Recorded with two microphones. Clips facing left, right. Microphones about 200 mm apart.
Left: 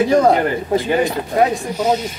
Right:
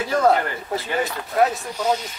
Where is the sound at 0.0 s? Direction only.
20° left (ahead or behind).